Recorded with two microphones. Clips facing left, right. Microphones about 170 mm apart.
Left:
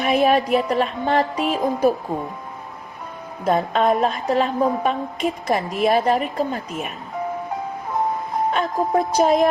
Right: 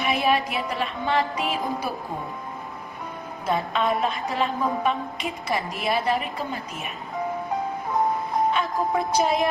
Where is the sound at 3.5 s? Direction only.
45° left (ahead or behind).